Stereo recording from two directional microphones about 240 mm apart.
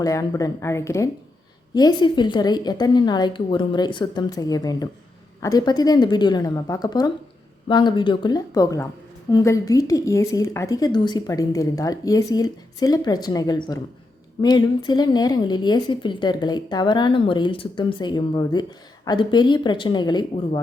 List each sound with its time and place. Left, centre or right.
0.0 s a woman's voice: centre